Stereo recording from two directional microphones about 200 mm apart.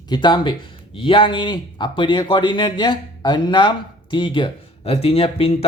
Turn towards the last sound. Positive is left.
turn(degrees=30)  # may be behind; listen again after turning